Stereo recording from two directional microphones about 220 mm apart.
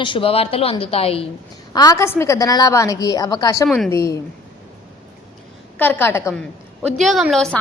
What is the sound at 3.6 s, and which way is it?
Speech, centre (ahead or behind).